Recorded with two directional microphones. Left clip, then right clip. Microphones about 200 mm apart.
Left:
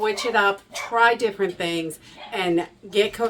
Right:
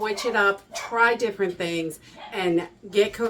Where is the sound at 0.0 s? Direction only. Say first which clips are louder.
Left 2 dB; 20° left (ahead or behind).